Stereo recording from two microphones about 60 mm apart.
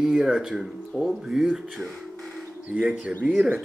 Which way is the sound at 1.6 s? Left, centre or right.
Centre.